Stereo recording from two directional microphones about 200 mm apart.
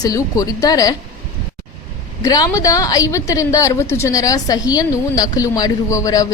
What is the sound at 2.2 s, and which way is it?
A woman's voice, 20° left (ahead or behind).